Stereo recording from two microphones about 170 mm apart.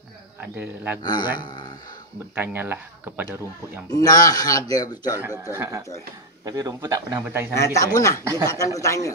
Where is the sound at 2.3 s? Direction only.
10° right (ahead or behind).